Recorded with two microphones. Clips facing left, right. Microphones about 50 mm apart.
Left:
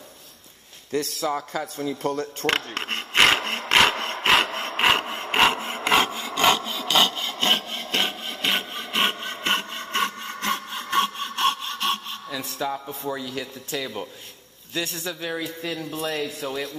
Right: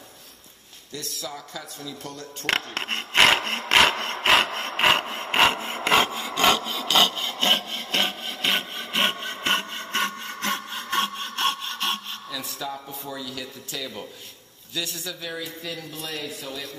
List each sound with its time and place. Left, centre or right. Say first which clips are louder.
0.9 s a man's voice: left 10 dB; left
2.4 s speech: right 1 dB; centre
3.3 s sawing: even; centre
12.3 s a sound: left 5 dB; left
13.1 s speech: left 3 dB; left